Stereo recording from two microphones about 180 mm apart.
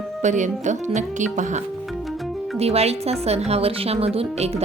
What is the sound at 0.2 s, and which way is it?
Speech, 45° right (ahead or behind).